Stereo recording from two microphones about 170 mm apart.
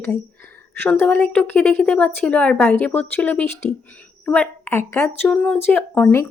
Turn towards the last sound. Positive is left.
turn(degrees=10)  # may be behind; listen again after turning